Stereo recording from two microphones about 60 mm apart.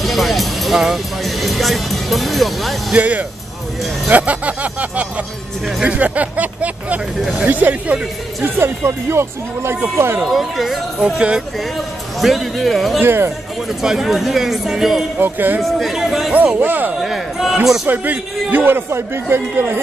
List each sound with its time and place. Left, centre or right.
0.0 s speech: centre
2.9 s speech: right
8.4 s a man's voice: right
10.3 s speech: centre
11.1 s speech: centre
12.2 s speech: centre
13.0 s a man's voice: right
13.8 s speech: centre
15.1 s a man's voice: right
15.6 s speech: centre
16.5 s a man's voice: right
17.0 s speech: centre
17.8 s a man's voice: right